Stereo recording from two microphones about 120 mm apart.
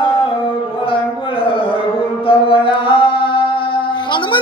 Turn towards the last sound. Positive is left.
turn(degrees=40)  # may be behind; listen again after turning